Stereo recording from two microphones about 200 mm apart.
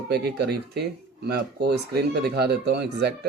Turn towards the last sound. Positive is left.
turn(degrees=-55)  # may be behind; listen again after turning